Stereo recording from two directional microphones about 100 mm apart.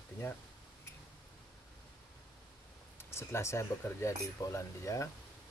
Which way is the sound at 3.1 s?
25° left (ahead or behind).